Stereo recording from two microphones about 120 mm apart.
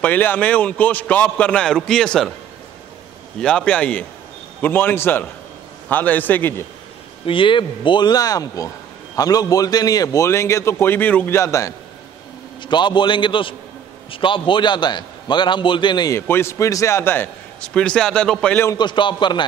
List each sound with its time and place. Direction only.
0.0 s a man's voice: 15° left (ahead or behind)
3.3 s a man's voice: 5° left (ahead or behind)
7.2 s a man's voice: 45° left (ahead or behind); by 11.7 s 25° left (ahead or behind)
12.6 s a man's voice: 40° left (ahead or behind)
16.1 s a man's voice: 20° left (ahead or behind)
17.7 s a man's voice: 5° left (ahead or behind)
18.7 s a man's voice: 40° left (ahead or behind)